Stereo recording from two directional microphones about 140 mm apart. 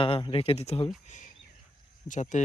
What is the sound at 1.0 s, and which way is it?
Speech, 60° left (ahead or behind).